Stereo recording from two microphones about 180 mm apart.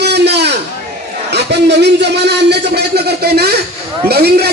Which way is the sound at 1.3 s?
70° right (ahead or behind).